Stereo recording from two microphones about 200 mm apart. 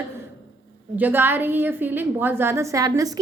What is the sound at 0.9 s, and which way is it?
Speech, 10° right (ahead or behind).